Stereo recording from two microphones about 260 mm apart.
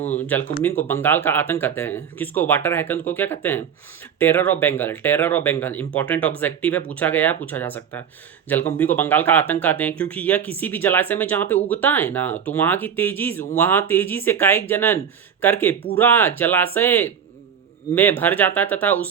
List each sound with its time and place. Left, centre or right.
0.0 s speech: left
0.6 s speech: centre